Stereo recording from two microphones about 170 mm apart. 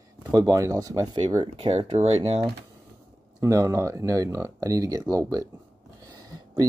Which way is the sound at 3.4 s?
20° right (ahead or behind).